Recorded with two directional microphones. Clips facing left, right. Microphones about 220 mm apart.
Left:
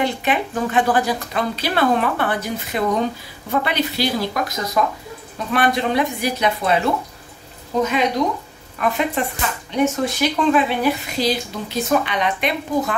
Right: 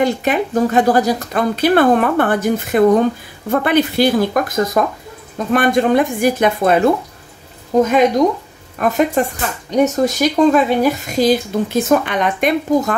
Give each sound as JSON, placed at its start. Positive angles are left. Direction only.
{"t": 0.0, "sound": "speech", "side_deg": -45}